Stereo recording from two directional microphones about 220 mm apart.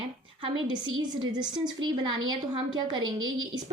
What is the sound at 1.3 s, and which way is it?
Speech, 20° right (ahead or behind).